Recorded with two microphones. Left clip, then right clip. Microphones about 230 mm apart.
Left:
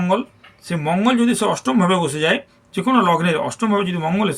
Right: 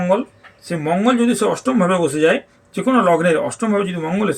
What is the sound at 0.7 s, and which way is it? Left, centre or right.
Speech, left.